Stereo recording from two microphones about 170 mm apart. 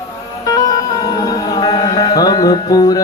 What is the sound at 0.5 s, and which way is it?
Music, 20° left (ahead or behind).